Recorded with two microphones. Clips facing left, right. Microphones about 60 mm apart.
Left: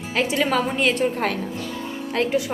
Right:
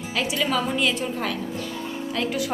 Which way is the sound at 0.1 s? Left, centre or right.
Left.